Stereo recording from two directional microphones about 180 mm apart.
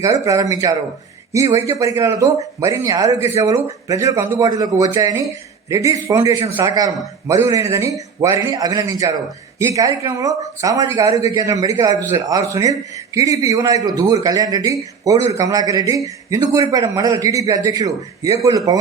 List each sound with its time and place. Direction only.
0.0 s a man's voice: 20° right (ahead or behind)